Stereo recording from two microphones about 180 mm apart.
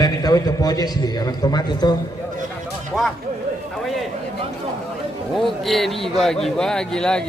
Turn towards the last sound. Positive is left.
turn(degrees=5)  # may be behind; listen again after turning